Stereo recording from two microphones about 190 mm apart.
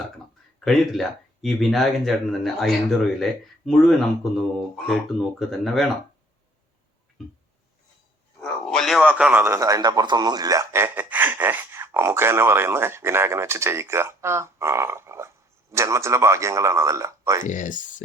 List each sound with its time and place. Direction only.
0.6 s speech: centre (ahead or behind)
8.4 s a man's voice: 5° left (ahead or behind); by 17.4 s 15° right (ahead or behind)
17.4 s speech: 40° left (ahead or behind)